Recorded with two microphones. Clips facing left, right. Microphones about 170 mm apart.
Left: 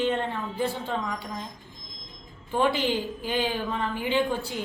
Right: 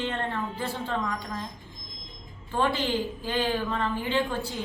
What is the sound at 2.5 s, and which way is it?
A man's voice, 15° left (ahead or behind).